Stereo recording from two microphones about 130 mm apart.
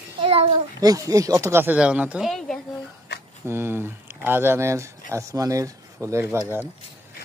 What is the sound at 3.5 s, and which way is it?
Speech, 20° right (ahead or behind).